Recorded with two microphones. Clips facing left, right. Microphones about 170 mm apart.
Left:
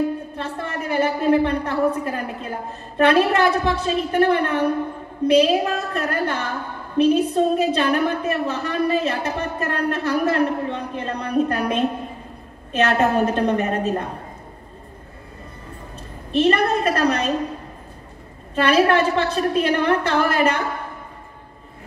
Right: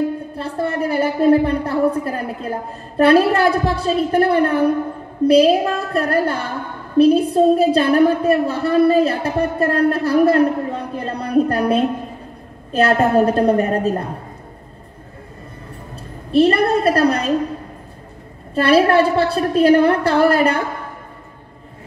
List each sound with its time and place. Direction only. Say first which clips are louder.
0.4 s a woman's voice: right 7 dB; 35° right (ahead or behind)
16.3 s a woman's voice: right 4 dB; 35° right (ahead or behind)
18.5 s a woman's voice: right 3 dB; 35° right (ahead or behind)